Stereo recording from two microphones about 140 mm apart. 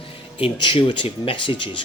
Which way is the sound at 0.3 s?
40° left (ahead or behind).